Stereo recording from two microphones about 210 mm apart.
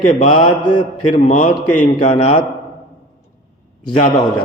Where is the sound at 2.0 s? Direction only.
25° left (ahead or behind).